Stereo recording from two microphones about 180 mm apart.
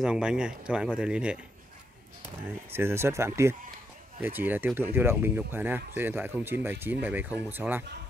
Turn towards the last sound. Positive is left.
turn(degrees=-10)  # may be behind; listen again after turning